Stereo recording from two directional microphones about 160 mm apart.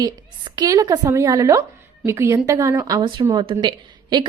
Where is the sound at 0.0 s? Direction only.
25° right (ahead or behind).